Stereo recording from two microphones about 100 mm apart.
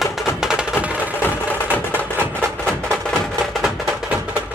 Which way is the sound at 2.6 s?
5° left (ahead or behind).